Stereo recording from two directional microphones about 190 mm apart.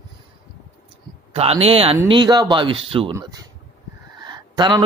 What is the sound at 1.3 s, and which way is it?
Speech, 30° right (ahead or behind).